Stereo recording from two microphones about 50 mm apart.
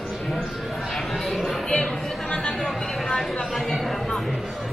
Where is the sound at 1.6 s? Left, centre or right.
Centre.